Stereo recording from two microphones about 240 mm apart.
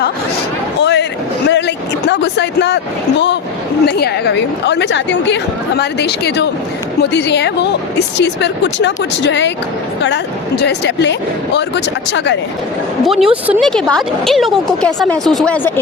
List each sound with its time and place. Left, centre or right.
0.8 s a sound: left
1.5 s a woman's voice: left
13.1 s a woman's voice: centre